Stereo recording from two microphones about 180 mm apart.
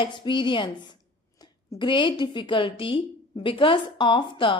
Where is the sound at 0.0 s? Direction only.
25° left (ahead or behind).